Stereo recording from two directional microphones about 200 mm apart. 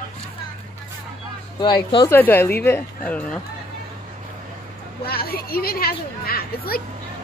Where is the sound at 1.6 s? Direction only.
25° left (ahead or behind).